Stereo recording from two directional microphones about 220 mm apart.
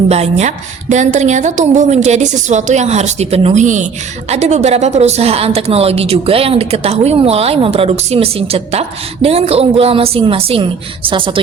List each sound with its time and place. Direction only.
0.1 s a woman's voice: 30° right (ahead or behind)